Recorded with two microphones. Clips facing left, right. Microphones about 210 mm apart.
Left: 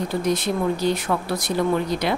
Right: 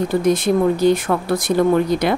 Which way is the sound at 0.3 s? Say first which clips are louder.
Right 6 dB; 50° right (ahead or behind).